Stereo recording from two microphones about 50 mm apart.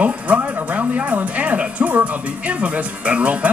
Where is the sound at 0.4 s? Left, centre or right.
Right.